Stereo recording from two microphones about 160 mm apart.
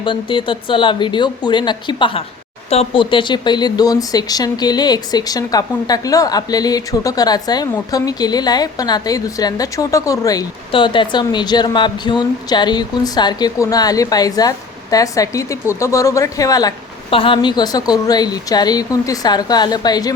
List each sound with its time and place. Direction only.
0.0 s speech: 30° left (ahead or behind)
10.7 s speech: 30° left (ahead or behind)
17.1 s speech: 35° left (ahead or behind)